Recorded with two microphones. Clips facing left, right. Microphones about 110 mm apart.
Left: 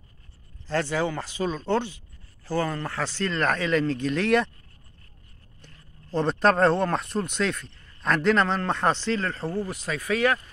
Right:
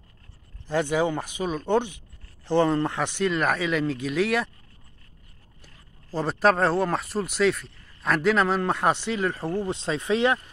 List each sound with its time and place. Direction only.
0.7 s speech: 15° right (ahead or behind)
5.6 s speech: 5° right (ahead or behind); by 10.4 s 25° right (ahead or behind)